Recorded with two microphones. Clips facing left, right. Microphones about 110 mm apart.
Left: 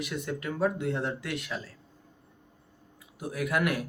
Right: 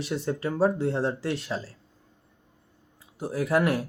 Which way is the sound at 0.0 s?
30° right (ahead or behind).